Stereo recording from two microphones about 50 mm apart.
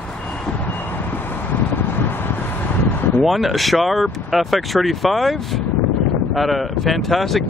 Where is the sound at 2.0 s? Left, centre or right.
Left.